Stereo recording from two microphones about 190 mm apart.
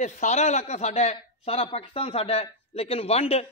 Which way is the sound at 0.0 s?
40° left (ahead or behind).